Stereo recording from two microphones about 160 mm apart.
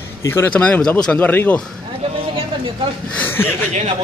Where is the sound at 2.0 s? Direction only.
35° right (ahead or behind).